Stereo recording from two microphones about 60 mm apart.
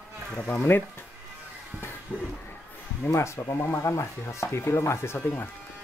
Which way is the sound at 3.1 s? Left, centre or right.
Left.